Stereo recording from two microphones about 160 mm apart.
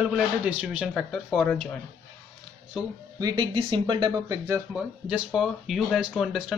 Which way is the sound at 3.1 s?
25° right (ahead or behind).